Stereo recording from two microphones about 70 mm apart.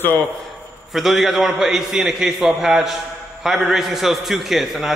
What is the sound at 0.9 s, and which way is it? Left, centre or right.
A man's voice, centre.